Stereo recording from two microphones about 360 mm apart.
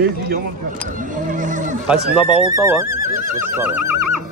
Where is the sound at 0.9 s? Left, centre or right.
Right.